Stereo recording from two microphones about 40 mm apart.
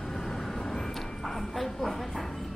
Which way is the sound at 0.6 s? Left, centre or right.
Centre.